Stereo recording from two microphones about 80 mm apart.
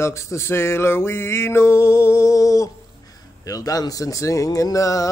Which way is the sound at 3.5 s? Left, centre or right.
Left.